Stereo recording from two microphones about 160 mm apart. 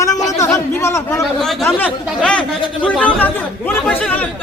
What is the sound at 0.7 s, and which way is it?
Speech, 15° left (ahead or behind).